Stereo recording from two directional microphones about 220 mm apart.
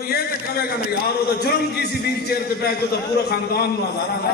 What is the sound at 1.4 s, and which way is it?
A man's voice, 45° left (ahead or behind).